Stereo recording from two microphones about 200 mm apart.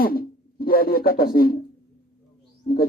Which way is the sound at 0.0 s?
50° left (ahead or behind).